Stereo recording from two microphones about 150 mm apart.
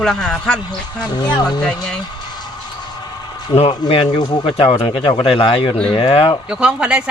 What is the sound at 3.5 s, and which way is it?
Speech, 35° left (ahead or behind).